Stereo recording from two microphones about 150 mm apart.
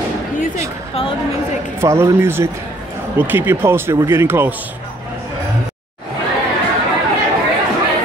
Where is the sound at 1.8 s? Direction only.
20° right (ahead or behind).